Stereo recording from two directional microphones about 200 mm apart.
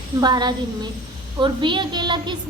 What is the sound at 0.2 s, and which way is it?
A woman's voice, 20° right (ahead or behind).